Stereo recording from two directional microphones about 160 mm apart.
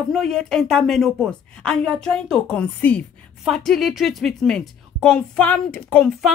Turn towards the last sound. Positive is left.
turn(degrees=5)  # may be behind; listen again after turning